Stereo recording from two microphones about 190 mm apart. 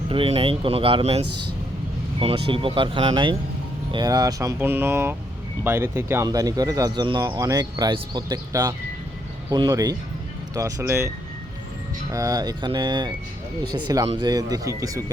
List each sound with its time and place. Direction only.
0.1 s speech: 30° right (ahead or behind)
2.2 s speech: 30° right (ahead or behind); by 11.1 s 15° right (ahead or behind)
12.1 s speech: 20° right (ahead or behind)